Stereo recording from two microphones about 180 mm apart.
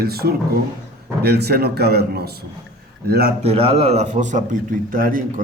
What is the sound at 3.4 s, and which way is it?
A man's voice, 35° right (ahead or behind).